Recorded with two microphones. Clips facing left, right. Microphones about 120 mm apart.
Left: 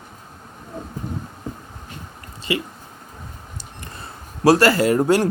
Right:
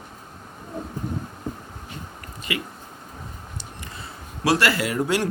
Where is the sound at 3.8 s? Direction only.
45° left (ahead or behind).